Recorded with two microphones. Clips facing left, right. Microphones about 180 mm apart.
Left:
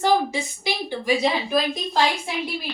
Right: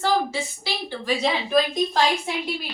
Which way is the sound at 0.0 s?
15° left (ahead or behind).